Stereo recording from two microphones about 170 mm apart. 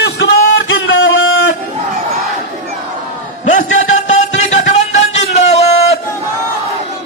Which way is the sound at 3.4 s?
45° left (ahead or behind).